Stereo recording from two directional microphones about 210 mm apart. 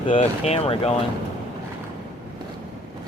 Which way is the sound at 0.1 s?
30° left (ahead or behind).